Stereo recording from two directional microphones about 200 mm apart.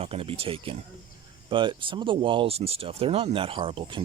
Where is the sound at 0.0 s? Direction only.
30° right (ahead or behind).